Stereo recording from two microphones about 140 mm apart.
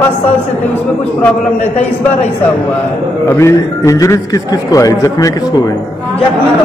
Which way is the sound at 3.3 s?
20° left (ahead or behind).